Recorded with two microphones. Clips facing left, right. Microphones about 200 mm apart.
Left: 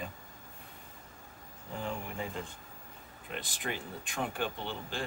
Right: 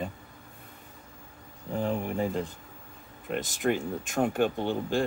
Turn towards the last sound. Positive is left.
turn(degrees=-45)  # may be behind; listen again after turning